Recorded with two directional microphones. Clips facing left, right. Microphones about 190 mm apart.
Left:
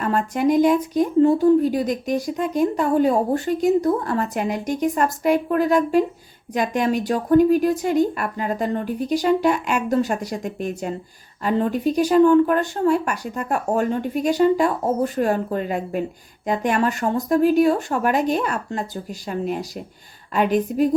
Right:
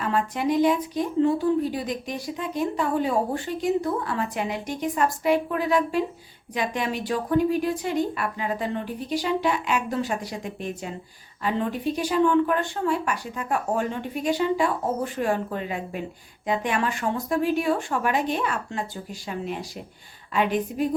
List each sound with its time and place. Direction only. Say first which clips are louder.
0.0 s speech: left 5 dB; 45° left (ahead or behind)